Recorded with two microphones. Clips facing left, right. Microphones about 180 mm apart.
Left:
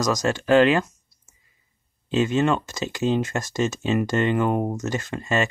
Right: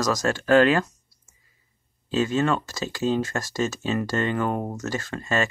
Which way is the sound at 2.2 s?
20° left (ahead or behind).